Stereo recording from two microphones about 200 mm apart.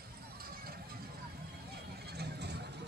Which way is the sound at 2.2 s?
55° right (ahead or behind).